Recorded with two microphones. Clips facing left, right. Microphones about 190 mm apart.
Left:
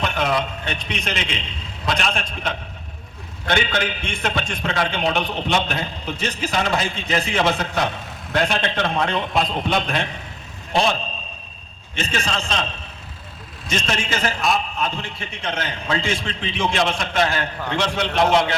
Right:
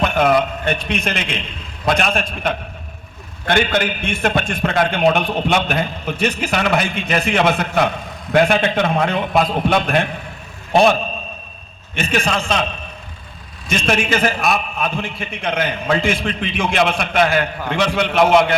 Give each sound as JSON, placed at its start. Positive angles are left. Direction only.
{"t": 0.0, "sound": "a man's voice", "side_deg": -55}
{"t": 12.2, "sound": "a man's voice", "side_deg": -55}
{"t": 13.7, "sound": "a man's voice", "side_deg": -55}